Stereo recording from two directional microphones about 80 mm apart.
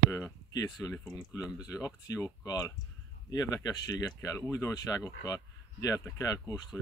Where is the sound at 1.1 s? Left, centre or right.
Left.